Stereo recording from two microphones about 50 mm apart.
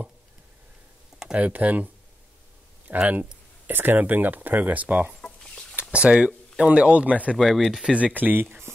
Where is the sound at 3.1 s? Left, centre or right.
Right.